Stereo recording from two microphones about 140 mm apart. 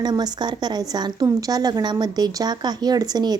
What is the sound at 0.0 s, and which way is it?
Speech, 30° right (ahead or behind).